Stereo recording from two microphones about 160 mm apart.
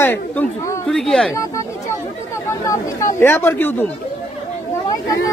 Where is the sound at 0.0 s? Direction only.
15° left (ahead or behind).